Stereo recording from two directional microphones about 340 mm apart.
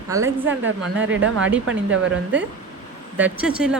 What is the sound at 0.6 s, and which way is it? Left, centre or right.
Speech, right.